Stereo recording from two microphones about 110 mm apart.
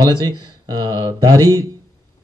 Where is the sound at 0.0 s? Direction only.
40° right (ahead or behind).